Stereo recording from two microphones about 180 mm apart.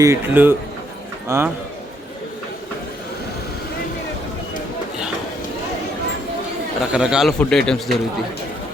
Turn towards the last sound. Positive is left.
turn(degrees=5)  # may be behind; listen again after turning